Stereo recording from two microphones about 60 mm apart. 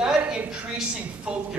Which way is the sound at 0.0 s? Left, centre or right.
Centre.